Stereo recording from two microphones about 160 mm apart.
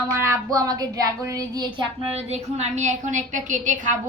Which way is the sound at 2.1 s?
40° right (ahead or behind).